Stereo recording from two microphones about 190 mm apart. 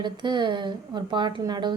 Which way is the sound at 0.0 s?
25° right (ahead or behind).